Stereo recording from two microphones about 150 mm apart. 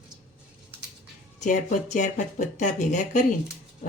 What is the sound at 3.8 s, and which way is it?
Speech, 65° left (ahead or behind).